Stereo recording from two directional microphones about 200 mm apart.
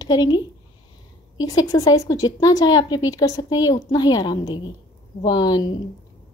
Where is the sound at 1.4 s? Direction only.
15° left (ahead or behind).